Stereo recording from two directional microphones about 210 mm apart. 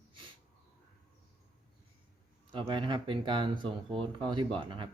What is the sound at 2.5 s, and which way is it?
A man's voice, 20° right (ahead or behind).